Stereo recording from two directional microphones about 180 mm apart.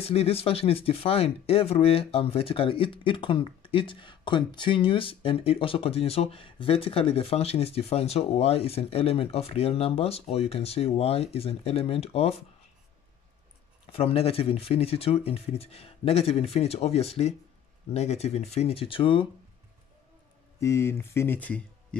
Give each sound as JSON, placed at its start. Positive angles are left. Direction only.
{"t": 0.0, "sound": "speech", "side_deg": 35}
{"t": 13.9, "sound": "speech", "side_deg": 35}
{"t": 20.6, "sound": "speech", "side_deg": 15}